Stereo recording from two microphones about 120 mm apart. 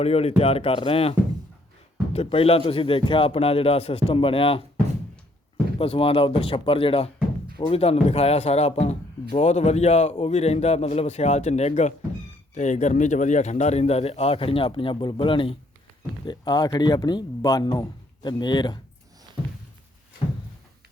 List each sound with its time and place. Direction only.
0.0 s a man's voice: 60° left (ahead or behind)
2.1 s a man's voice: 55° left (ahead or behind)
5.7 s a man's voice: 50° left (ahead or behind); by 11.9 s 70° left (ahead or behind)
12.5 s a man's voice: 85° left; by 15.5 s 45° left (ahead or behind)
16.2 s speech: 35° left (ahead or behind)